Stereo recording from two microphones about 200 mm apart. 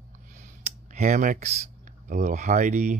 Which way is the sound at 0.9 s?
40° right (ahead or behind).